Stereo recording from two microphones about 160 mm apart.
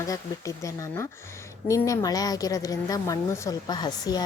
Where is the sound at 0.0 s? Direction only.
20° left (ahead or behind).